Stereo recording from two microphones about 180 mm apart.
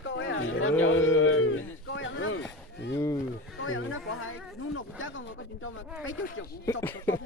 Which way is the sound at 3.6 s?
90° left.